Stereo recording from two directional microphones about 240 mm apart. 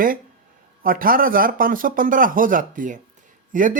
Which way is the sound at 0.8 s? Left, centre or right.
Right.